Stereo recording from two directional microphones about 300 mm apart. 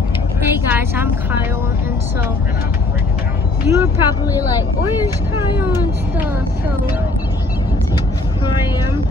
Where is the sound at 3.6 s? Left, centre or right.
Centre.